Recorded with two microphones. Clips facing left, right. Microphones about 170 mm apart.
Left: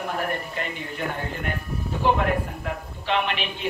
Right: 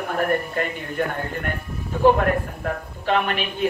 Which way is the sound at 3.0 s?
45° right (ahead or behind).